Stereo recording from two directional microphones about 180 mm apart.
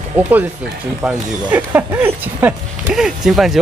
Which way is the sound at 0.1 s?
10° right (ahead or behind).